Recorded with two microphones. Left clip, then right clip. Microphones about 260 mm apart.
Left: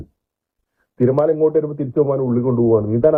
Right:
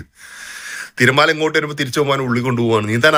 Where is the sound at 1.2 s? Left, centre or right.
Right.